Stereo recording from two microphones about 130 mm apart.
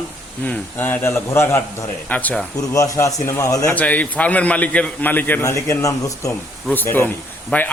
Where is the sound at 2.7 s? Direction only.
25° left (ahead or behind).